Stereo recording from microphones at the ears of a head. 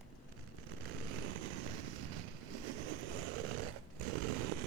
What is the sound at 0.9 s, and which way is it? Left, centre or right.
Vehicle, right.